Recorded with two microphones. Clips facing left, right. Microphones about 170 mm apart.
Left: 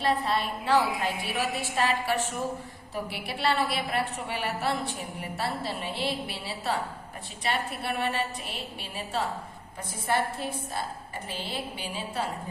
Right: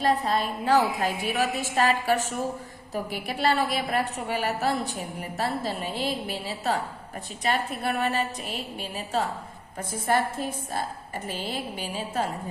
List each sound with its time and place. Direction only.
0.0 s a woman's voice: 40° right (ahead or behind)
10.1 s a woman's voice: 45° right (ahead or behind)
11.3 s a woman's voice: 45° right (ahead or behind)